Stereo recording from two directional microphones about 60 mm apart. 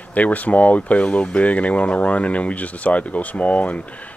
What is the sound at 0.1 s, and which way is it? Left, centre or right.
Speech, left.